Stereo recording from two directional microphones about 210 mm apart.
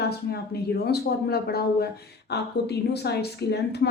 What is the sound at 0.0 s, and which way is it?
A woman's voice, 50° left (ahead or behind).